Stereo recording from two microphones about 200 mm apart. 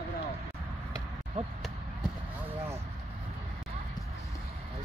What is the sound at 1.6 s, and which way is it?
Basketball bounce, 5° right (ahead or behind).